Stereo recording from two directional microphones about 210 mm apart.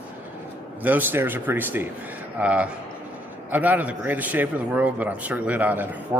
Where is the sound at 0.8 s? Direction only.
10° right (ahead or behind).